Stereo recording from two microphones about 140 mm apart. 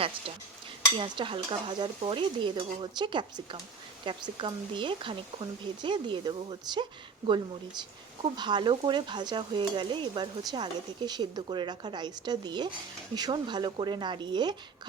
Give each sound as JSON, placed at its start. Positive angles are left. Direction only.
{"t": 0.9, "sound": "stir", "side_deg": -35}